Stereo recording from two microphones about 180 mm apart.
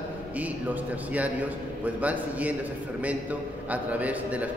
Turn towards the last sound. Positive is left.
turn(degrees=-10)  # may be behind; listen again after turning